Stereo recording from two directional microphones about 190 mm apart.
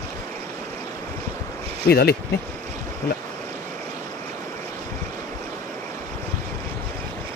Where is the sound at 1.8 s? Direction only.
55° left (ahead or behind).